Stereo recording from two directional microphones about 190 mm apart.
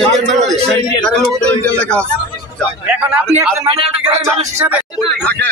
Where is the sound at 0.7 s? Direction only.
5° left (ahead or behind).